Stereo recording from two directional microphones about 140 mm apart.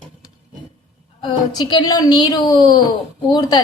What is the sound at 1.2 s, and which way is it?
A woman's voice, 30° left (ahead or behind).